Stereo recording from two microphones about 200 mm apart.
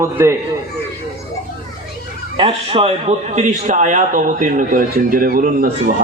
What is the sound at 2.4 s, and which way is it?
A man's voice, 30° right (ahead or behind).